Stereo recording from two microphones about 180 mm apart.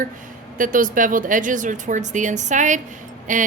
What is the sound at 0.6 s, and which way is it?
A woman's voice, 50° right (ahead or behind).